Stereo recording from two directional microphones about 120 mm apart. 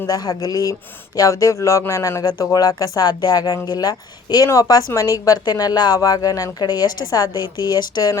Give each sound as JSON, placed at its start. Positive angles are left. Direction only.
{"t": 0.0, "sound": "speech", "side_deg": 30}